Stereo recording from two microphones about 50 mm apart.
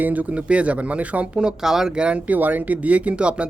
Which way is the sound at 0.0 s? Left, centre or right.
Right.